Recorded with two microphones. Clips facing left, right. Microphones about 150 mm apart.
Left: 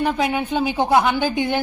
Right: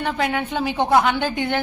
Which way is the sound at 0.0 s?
10° left (ahead or behind).